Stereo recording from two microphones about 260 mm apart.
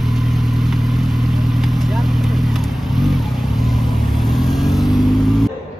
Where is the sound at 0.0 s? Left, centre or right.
Centre.